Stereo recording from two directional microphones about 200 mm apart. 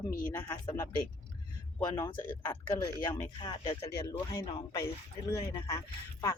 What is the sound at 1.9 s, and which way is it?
Speech, 10° left (ahead or behind).